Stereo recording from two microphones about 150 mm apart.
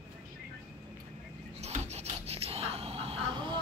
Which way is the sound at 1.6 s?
45° right (ahead or behind).